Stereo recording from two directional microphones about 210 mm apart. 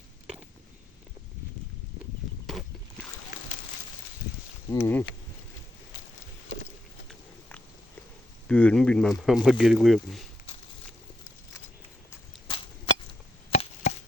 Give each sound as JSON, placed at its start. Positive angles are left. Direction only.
{"t": 4.3, "sound": "walk", "side_deg": 55}
{"t": 4.7, "sound": "speech", "side_deg": 10}
{"t": 8.4, "sound": "speech", "side_deg": 5}
{"t": 12.5, "sound": "chop", "side_deg": 25}